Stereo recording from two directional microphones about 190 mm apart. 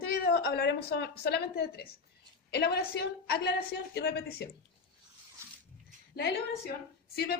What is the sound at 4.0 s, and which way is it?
Speech, 60° left (ahead or behind).